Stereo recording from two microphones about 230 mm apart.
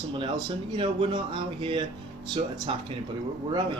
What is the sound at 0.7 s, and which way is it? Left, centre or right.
Speech, right.